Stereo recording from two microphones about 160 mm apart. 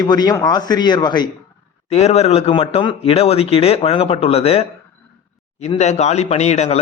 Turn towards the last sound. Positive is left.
turn(degrees=45)  # may be behind; listen again after turning